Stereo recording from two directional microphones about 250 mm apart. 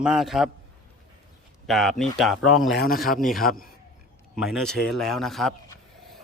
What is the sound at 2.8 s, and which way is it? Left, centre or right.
Speech, left.